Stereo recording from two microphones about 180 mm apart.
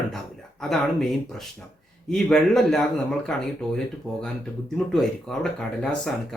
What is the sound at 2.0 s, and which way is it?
Speech, centre (ahead or behind).